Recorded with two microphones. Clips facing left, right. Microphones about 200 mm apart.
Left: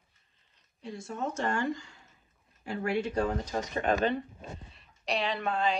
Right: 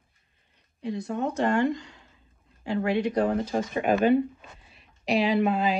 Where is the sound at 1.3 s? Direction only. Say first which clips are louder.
Right 8 dB; 20° right (ahead or behind).